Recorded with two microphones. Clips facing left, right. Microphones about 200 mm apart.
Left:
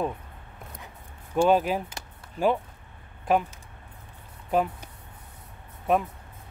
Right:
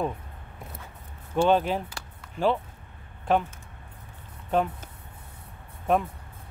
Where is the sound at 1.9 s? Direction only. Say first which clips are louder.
Even; 15° left (ahead or behind).